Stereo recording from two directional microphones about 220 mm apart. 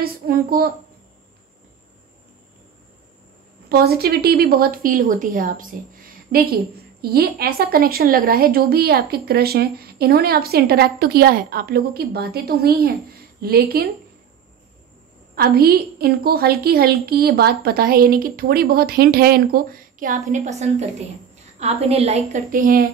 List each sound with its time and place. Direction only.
0.0 s a woman's voice: 45° right (ahead or behind)
3.6 s a woman's voice: 45° right (ahead or behind)
15.3 s a woman's voice: 45° right (ahead or behind)